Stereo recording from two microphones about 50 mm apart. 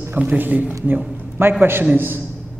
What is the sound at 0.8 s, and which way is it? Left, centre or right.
A man's voice, right.